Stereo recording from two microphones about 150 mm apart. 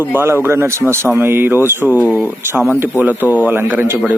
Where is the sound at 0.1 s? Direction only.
15° right (ahead or behind).